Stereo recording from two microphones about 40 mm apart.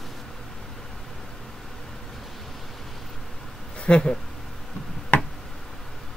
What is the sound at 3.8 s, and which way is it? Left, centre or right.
Speech, left.